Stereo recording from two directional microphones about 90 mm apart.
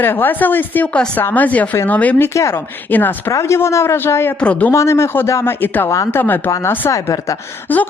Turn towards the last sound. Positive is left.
turn(degrees=20)  # may be behind; listen again after turning